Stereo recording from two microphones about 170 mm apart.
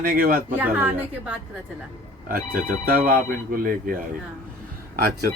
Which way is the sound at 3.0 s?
55° right (ahead or behind).